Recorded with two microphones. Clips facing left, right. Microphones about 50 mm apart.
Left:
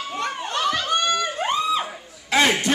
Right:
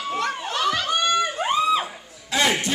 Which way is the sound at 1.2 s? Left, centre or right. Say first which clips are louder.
Right 2 dB; centre.